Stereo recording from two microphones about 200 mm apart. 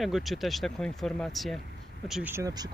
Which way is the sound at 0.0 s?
Centre (ahead or behind).